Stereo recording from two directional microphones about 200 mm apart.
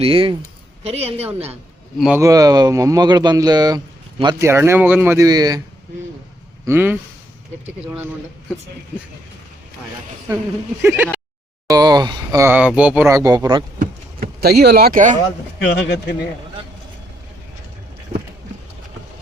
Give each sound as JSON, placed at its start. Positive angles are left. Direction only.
{"t": 0.0, "sound": "a woman's voice", "side_deg": -25}
{"t": 2.0, "sound": "speech", "side_deg": -5}
{"t": 2.2, "sound": "speech", "side_deg": -15}
{"t": 6.7, "sound": "speech", "side_deg": -10}
{"t": 10.8, "sound": "speech", "side_deg": -10}
{"t": 13.7, "sound": "a sound", "side_deg": -50}
{"t": 15.5, "sound": "a man's voice", "side_deg": 55}